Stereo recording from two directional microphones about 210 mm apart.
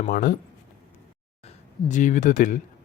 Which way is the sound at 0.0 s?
40° left (ahead or behind).